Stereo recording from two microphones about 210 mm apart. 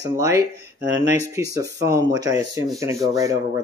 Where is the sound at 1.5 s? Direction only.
15° right (ahead or behind).